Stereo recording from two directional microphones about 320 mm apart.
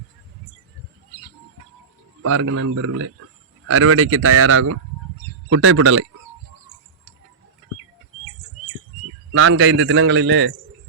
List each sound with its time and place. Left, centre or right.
2.2 s a man's voice: right
9.3 s a man's voice: right